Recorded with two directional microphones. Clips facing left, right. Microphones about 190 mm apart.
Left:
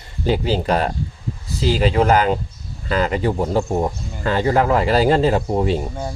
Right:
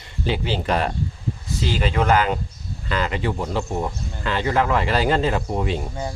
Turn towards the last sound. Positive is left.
turn(degrees=35)  # may be behind; listen again after turning